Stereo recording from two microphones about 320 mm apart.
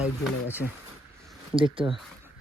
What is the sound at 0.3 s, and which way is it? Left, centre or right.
Speech, centre.